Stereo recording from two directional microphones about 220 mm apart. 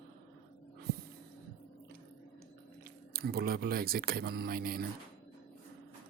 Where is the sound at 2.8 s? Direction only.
45° right (ahead or behind).